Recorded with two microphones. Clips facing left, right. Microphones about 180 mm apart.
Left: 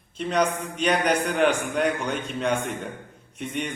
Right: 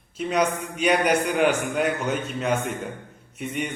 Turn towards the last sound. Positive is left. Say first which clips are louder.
# right 1 dB
turn(degrees=-10)  # may be behind; listen again after turning